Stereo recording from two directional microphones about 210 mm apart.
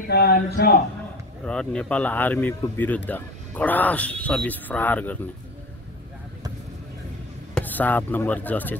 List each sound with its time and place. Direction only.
0.1 s speech: 50° left (ahead or behind)
1.4 s speech: 5° left (ahead or behind)
7.5 s speech: 10° left (ahead or behind)